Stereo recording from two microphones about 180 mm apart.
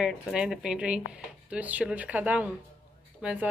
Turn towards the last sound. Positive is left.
turn(degrees=-5)  # may be behind; listen again after turning